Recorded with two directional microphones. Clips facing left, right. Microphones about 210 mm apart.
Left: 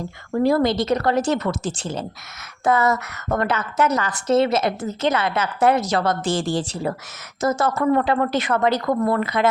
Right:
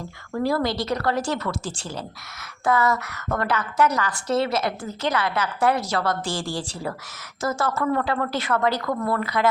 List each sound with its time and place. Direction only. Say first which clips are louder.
0.3 s a woman's voice: left 5 dB; 20° left (ahead or behind)